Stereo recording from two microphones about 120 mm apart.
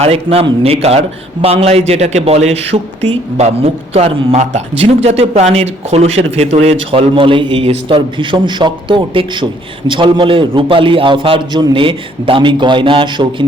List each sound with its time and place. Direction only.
0.0 s a man's voice: 55° right (ahead or behind)